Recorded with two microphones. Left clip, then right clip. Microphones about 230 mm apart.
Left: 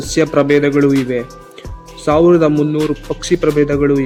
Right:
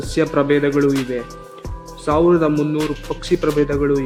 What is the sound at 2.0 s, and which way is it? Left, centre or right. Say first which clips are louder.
Speech: left 5 dB; left.